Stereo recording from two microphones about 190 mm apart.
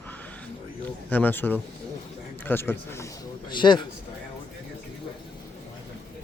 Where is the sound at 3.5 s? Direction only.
25° left (ahead or behind).